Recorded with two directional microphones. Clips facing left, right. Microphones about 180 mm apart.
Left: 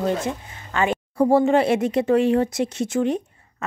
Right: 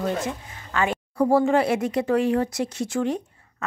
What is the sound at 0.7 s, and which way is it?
Speech, 25° left (ahead or behind).